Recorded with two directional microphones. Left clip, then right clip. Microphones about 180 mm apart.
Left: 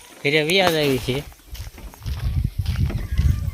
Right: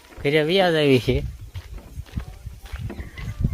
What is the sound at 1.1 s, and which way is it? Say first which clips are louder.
Speech: right 2 dB; 30° right (ahead or behind).